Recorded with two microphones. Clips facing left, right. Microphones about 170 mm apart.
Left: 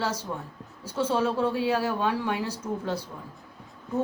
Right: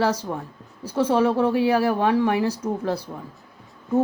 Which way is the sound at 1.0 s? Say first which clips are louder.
Right 6 dB; 75° right (ahead or behind).